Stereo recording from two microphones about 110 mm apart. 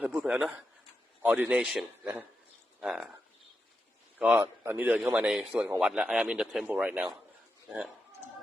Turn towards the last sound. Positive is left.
turn(degrees=-5)  # may be behind; listen again after turning